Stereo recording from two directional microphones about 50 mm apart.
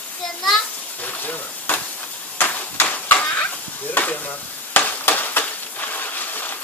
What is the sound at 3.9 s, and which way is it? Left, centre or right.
Stir, left.